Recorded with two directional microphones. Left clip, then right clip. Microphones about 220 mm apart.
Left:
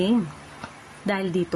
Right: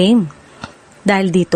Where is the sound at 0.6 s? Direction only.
45° right (ahead or behind).